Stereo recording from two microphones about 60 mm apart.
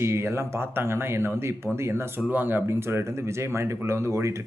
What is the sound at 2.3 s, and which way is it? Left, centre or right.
Speech, right.